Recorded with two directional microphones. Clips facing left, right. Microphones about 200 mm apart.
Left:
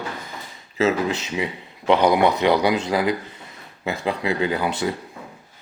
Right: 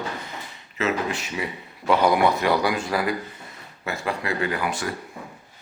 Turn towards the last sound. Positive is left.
turn(degrees=25)  # may be behind; listen again after turning